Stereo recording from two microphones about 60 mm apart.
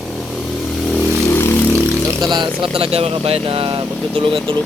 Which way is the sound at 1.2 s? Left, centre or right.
Left.